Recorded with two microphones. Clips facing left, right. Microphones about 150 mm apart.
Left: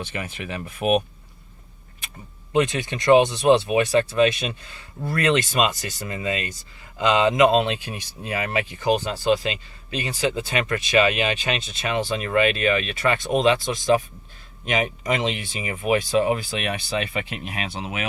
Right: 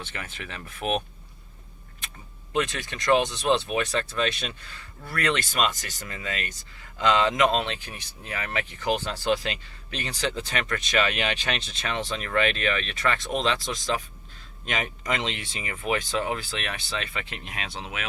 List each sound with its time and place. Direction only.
0.0 s speech: 15° left (ahead or behind)
2.5 s speech: 15° left (ahead or behind)
4.9 s speech: 25° left (ahead or behind)